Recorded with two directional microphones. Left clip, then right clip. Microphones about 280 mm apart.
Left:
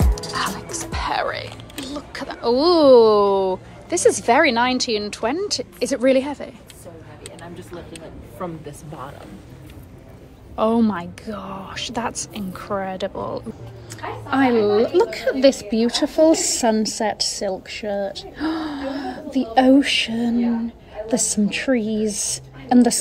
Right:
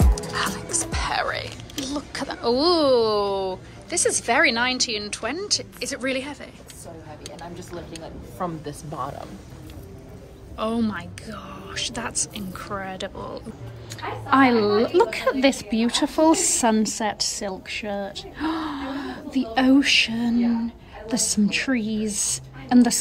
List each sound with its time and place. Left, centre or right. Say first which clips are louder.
0.1 s music: left 2 dB; centre
1.9 s speech: even; centre
10.5 s a woman's voice: left 7 dB; centre